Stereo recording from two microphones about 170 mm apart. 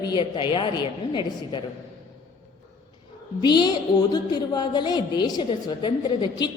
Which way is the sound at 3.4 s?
25° left (ahead or behind).